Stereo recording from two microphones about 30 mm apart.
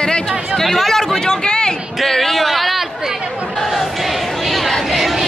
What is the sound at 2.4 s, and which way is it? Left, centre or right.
Chatter, centre.